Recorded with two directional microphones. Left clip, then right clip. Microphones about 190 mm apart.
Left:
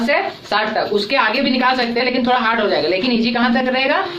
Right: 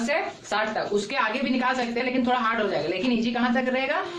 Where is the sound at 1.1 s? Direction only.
15° left (ahead or behind).